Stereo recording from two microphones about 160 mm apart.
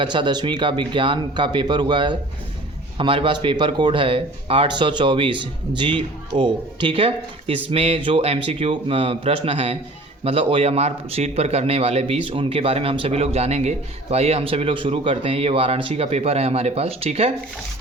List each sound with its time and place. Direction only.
0.0 s a man's voice: 30° right (ahead or behind)